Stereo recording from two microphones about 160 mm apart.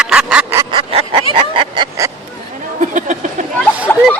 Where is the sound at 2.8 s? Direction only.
50° right (ahead or behind).